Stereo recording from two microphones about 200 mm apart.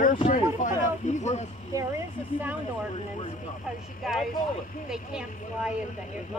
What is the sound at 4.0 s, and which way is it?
A woman's voice, centre (ahead or behind).